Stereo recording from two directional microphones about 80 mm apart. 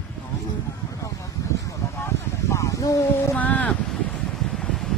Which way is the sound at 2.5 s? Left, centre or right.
Left.